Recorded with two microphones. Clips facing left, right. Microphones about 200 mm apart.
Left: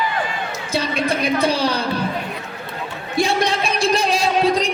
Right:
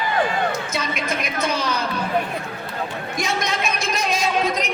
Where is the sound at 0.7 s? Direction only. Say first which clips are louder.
Left 5 dB; 30° left (ahead or behind).